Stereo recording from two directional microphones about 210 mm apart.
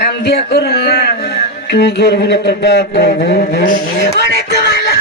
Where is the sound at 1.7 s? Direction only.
55° left (ahead or behind).